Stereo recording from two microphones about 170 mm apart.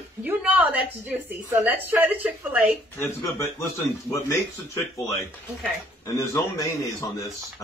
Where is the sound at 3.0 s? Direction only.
15° left (ahead or behind).